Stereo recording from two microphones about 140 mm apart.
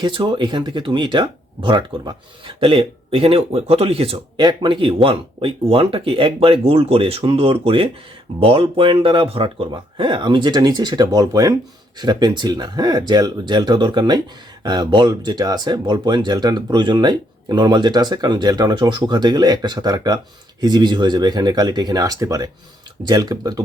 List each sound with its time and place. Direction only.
0.0 s speech: 35° right (ahead or behind)